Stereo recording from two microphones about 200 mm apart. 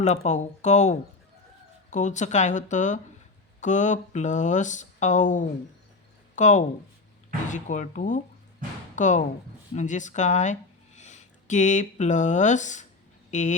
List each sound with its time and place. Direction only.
0.0 s speech: 35° left (ahead or behind)